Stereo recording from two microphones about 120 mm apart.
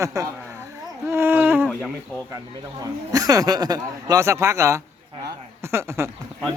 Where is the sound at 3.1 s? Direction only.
30° right (ahead or behind).